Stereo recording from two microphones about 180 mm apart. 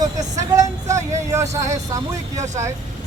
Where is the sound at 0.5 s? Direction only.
15° right (ahead or behind).